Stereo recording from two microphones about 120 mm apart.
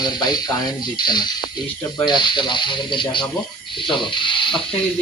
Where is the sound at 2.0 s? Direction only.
40° left (ahead or behind).